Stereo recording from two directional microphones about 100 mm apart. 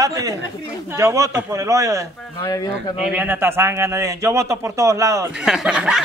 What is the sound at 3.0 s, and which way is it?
A man's voice, 15° right (ahead or behind).